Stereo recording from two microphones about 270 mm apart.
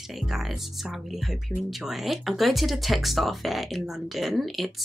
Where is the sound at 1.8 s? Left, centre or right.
Centre.